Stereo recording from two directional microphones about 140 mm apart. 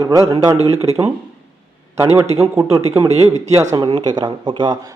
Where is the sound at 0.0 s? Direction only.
25° right (ahead or behind).